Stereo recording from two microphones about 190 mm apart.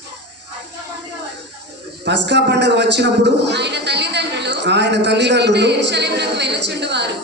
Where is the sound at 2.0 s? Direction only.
65° right (ahead or behind).